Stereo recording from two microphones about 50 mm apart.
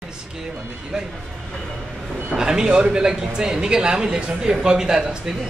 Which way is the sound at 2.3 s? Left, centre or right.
Centre.